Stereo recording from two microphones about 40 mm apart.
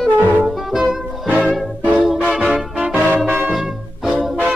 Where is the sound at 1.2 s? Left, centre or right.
Right.